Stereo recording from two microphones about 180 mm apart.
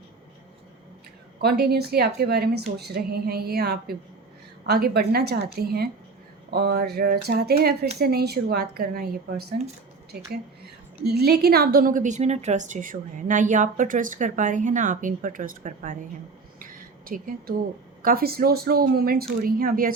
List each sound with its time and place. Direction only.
1.4 s speech: 60° right (ahead or behind)
11.0 s a woman's voice: 65° right (ahead or behind); by 16.0 s 45° right (ahead or behind)
16.6 s a sound: 50° right (ahead or behind)
18.0 s a woman's voice: 55° right (ahead or behind)